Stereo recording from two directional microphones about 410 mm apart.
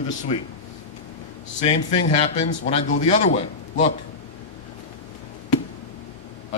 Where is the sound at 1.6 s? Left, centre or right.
Centre.